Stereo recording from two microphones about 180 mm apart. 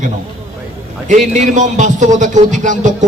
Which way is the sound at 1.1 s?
40° right (ahead or behind).